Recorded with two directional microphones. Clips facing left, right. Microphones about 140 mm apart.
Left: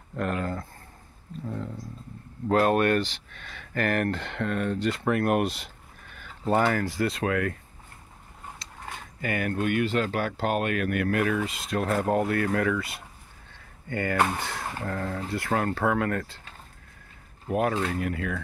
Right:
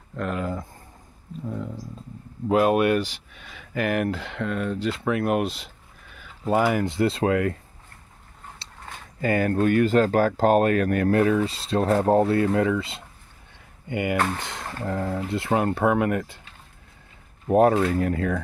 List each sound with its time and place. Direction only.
0.1 s speech: centre (ahead or behind)
6.8 s speech: 25° right (ahead or behind)
8.6 s a sound: 30° right (ahead or behind)
9.2 s speech: 30° right (ahead or behind)
13.5 s a sound: 15° right (ahead or behind)
14.9 s speech: 20° right (ahead or behind)
17.5 s speech: 35° right (ahead or behind)